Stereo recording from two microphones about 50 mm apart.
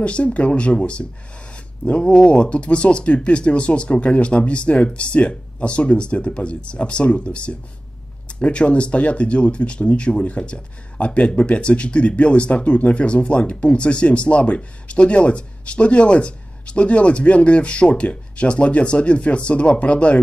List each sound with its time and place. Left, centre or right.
0.0 s speech: left